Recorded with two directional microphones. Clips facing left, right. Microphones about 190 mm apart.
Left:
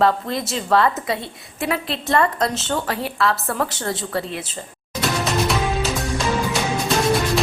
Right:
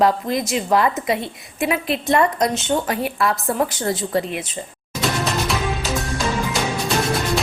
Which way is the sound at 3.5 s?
20° right (ahead or behind).